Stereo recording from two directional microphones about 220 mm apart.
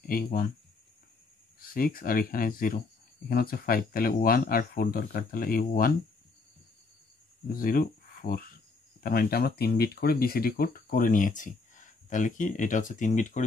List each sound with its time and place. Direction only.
0.0 s speech: 40° left (ahead or behind)
1.6 s speech: 40° left (ahead or behind)
7.5 s speech: 40° left (ahead or behind)